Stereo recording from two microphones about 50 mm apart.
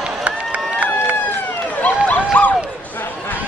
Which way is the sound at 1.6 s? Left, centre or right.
Left.